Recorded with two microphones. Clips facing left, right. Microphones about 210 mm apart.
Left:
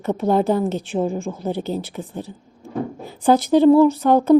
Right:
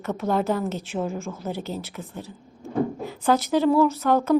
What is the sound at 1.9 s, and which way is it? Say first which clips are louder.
Speech: left 6 dB; 30° left (ahead or behind).